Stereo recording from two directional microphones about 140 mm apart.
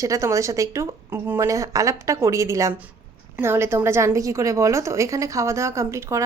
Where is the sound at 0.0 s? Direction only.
20° right (ahead or behind).